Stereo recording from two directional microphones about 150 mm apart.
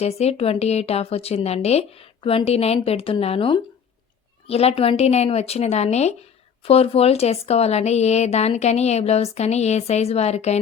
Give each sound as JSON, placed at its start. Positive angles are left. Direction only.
{"t": 0.0, "sound": "speech", "side_deg": 45}